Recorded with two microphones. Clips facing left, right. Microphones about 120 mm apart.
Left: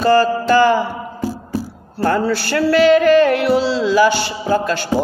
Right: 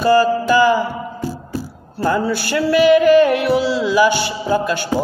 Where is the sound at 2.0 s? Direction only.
15° right (ahead or behind).